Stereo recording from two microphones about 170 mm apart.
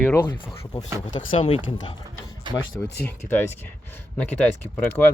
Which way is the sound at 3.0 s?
10° left (ahead or behind).